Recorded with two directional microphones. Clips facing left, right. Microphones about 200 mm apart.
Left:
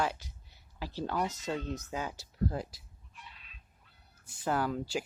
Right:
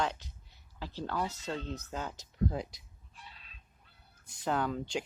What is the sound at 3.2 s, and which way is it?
Fowl, 35° right (ahead or behind).